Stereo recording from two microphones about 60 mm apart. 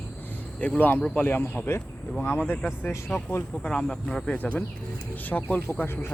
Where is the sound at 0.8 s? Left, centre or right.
Left.